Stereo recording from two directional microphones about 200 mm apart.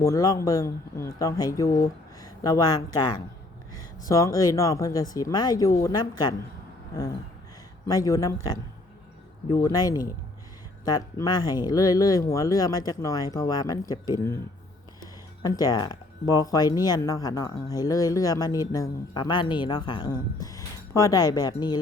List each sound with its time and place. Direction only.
0.0 s speech: 15° left (ahead or behind)
7.9 s speech: 15° left (ahead or behind)
9.6 s speech: 20° left (ahead or behind)
15.4 s speech: 20° left (ahead or behind)